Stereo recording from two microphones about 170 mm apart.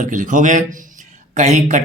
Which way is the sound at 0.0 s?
50° right (ahead or behind).